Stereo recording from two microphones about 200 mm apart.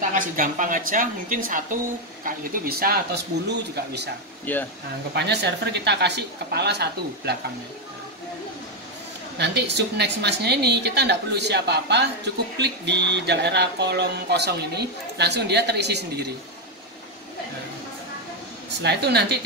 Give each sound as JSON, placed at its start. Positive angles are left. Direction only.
{"t": 0.1, "sound": "a woman's voice", "side_deg": -40}
{"t": 4.5, "sound": "speech", "side_deg": 10}
{"t": 5.1, "sound": "speech", "side_deg": -55}
{"t": 9.4, "sound": "speech", "side_deg": -55}
{"t": 18.8, "sound": "speech", "side_deg": -55}